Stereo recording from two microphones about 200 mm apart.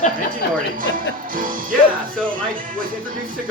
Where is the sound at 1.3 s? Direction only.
45° right (ahead or behind).